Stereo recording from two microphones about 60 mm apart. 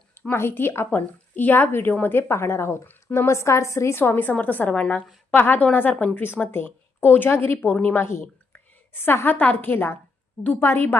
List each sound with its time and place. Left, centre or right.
0.3 s a woman's voice: left
4.0 s a woman's voice: left
8.0 s a woman's voice: left